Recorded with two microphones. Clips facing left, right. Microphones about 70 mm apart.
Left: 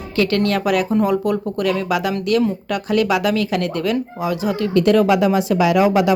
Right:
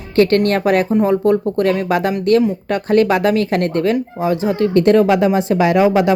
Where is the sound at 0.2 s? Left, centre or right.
Right.